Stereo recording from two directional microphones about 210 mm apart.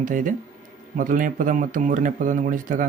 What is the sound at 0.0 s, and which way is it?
Speech, 40° right (ahead or behind).